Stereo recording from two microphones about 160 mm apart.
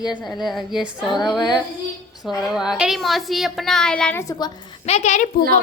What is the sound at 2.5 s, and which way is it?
A woman's voice, centre (ahead or behind).